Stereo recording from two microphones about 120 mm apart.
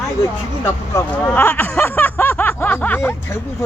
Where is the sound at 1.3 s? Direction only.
20° left (ahead or behind).